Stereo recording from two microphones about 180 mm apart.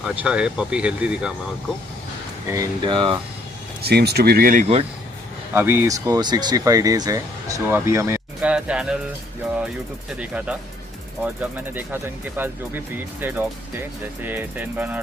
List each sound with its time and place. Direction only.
0.0 s speech: 5° right (ahead or behind)
2.4 s speech: 20° right (ahead or behind)
3.8 s speech: 65° right (ahead or behind)
5.5 s speech: 15° right (ahead or behind)
10.1 s speech: 5° right (ahead or behind)